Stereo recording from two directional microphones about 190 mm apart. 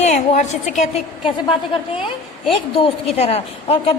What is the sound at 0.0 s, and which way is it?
Speech, 40° left (ahead or behind).